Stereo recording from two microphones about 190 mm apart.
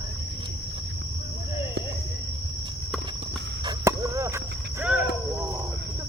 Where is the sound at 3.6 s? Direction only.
15° right (ahead or behind).